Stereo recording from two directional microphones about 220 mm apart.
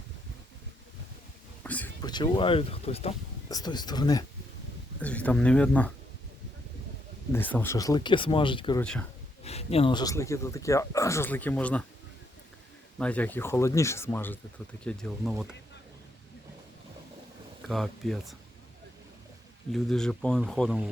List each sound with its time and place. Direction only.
1.6 s a sound: 5° left (ahead or behind)
2.0 s speech: 20° left (ahead or behind)
4.9 s speech: 5° left (ahead or behind)
7.3 s speech: 10° left (ahead or behind)
8.8 s speech: 5° left (ahead or behind)
9.4 s speech: 30° left (ahead or behind); by 11.9 s 5° left (ahead or behind)
13.0 s speech: 5° left (ahead or behind)
17.6 s speech: centre (ahead or behind)
19.7 s speech: centre (ahead or behind)